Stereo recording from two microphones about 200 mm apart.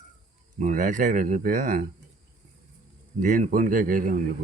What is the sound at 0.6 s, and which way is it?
Speech, 40° right (ahead or behind).